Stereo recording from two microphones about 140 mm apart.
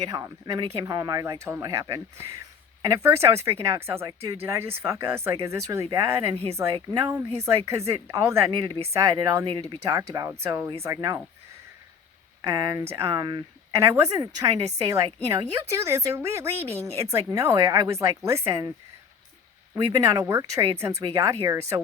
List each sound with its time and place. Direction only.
0.1 s a woman's voice: 25° right (ahead or behind)
6.3 s speech: 45° right (ahead or behind)
7.0 s a woman's voice: 20° right (ahead or behind)
12.4 s speech: 30° right (ahead or behind)
13.7 s a woman's voice: 20° right (ahead or behind)
19.7 s a woman's voice: 25° right (ahead or behind)